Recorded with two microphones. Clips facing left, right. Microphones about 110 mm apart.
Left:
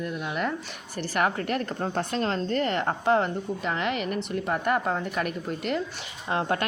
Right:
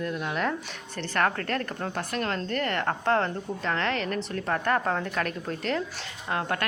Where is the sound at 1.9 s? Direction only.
25° left (ahead or behind); by 5.8 s 5° left (ahead or behind).